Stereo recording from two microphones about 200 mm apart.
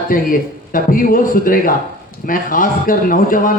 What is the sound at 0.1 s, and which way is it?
A man's voice, 45° left (ahead or behind).